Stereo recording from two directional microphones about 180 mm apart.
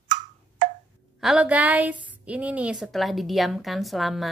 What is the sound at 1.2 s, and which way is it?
A woman's voice, 5° right (ahead or behind).